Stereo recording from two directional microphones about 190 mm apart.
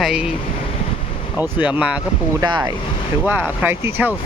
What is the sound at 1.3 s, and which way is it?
Speech, 5° right (ahead or behind).